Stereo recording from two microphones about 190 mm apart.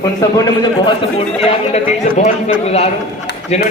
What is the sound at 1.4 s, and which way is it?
Speech, 35° left (ahead or behind).